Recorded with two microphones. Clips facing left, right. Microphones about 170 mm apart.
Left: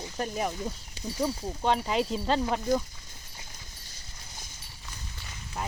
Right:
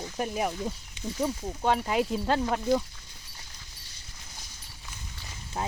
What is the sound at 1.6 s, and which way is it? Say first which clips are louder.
Speech: right 1 dB; 5° right (ahead or behind).